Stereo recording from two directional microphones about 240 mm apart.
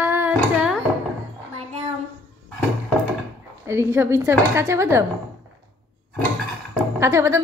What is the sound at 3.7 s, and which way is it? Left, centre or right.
Female singing, centre.